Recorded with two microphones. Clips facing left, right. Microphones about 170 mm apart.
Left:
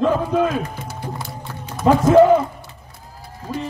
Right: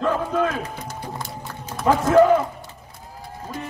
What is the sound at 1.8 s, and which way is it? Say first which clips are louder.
Speech: left 4 dB; 15° left (ahead or behind).